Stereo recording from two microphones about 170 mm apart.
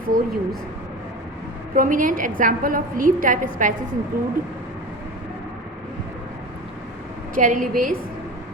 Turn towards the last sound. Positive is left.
turn(degrees=-50)  # may be behind; listen again after turning